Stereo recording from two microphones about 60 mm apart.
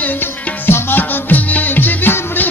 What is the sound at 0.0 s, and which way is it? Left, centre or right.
Music, left.